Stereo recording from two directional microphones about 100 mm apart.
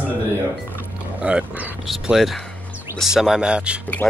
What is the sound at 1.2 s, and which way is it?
Speech, 15° right (ahead or behind).